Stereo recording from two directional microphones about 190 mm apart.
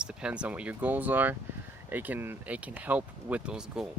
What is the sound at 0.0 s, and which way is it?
Speech, 5° right (ahead or behind).